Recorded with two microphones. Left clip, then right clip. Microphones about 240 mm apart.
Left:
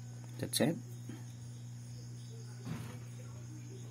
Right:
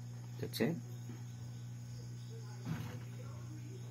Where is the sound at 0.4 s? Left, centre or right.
Left.